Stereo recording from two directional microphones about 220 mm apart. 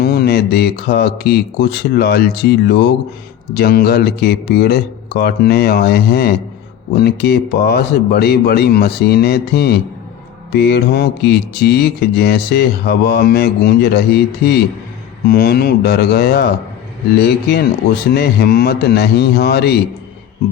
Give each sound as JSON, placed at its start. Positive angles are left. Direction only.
{"t": 0.0, "sound": "speech", "side_deg": 45}